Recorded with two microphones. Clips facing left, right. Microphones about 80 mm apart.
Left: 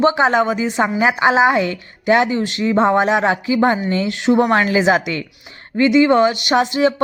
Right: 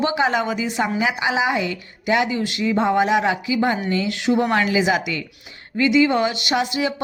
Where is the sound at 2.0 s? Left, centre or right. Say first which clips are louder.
Left 5 dB; left.